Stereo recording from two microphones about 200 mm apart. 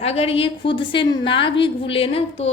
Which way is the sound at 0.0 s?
30° left (ahead or behind).